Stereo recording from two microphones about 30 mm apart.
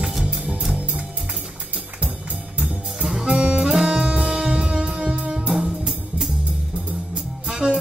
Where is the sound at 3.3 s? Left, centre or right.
Right.